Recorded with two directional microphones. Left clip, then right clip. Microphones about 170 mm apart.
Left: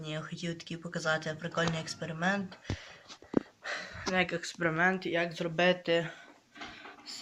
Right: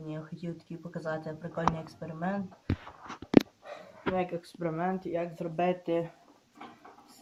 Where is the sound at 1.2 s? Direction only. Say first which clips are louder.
Left 4 dB; 10° left (ahead or behind).